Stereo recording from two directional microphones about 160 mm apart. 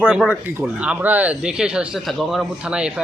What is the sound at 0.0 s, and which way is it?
Speech, centre (ahead or behind).